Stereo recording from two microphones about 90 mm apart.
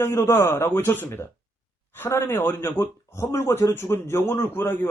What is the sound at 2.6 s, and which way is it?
Speech, 45° left (ahead or behind).